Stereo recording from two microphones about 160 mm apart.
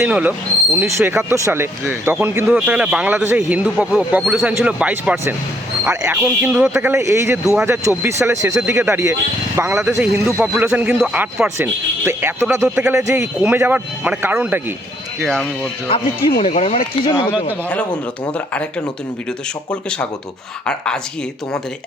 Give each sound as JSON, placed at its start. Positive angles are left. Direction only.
{"t": 0.0, "sound": "a man's voice", "side_deg": -10}
{"t": 15.2, "sound": "speech", "side_deg": 5}
{"t": 16.4, "sound": "speech", "side_deg": 40}
{"t": 20.7, "sound": "speech", "side_deg": 5}